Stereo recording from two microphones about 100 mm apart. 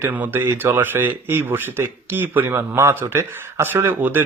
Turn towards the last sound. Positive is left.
turn(degrees=-20)  # may be behind; listen again after turning